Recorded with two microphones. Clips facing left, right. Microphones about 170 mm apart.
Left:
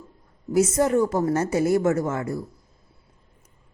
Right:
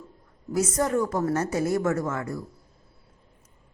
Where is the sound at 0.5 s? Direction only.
25° left (ahead or behind).